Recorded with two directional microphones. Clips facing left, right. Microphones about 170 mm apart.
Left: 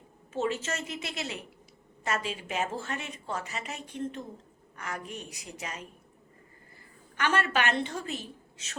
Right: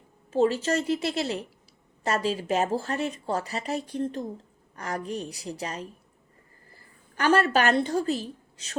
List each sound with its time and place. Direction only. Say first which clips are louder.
0.3 s a woman's voice: right 8 dB; 35° right (ahead or behind)
7.2 s a woman's voice: right 6 dB; 35° right (ahead or behind)